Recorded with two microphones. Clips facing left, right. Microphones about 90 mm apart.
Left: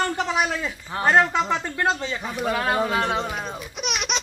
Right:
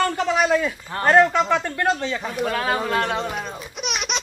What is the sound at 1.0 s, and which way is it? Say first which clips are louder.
Speech: right 3 dB; 60° right (ahead or behind).